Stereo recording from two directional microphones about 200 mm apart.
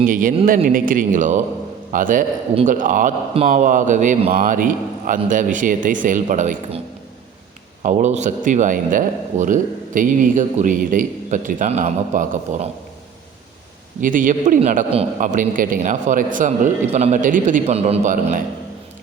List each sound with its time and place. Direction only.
0.0 s a man's voice: 45° right (ahead or behind)
7.8 s a man's voice: 35° right (ahead or behind)
14.0 s a man's voice: 40° right (ahead or behind)